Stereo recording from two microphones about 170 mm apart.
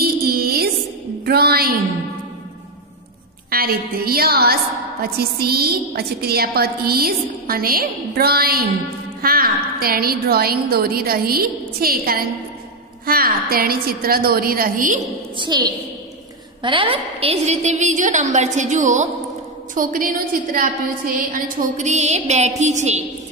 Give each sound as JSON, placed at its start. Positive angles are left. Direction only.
{"t": 0.0, "sound": "a sound", "side_deg": -65}
{"t": 1.2, "sound": "a woman's voice", "side_deg": -65}
{"t": 3.4, "sound": "a woman's voice", "side_deg": -60}
{"t": 15.3, "sound": "a woman's voice", "side_deg": -25}